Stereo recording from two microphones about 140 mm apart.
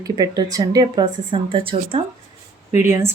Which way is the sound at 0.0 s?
25° right (ahead or behind).